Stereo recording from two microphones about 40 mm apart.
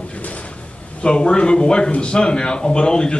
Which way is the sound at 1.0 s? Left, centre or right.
Left.